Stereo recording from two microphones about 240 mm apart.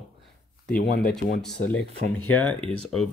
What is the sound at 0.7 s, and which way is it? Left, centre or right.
Speech, left.